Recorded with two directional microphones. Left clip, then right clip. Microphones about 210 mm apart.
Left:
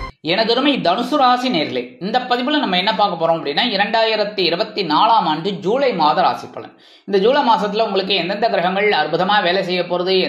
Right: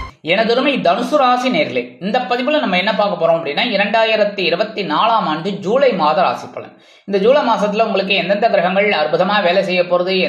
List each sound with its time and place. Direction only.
0.3 s speech: 25° left (ahead or behind)